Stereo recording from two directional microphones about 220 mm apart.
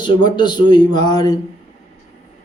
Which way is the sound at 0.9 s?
20° left (ahead or behind).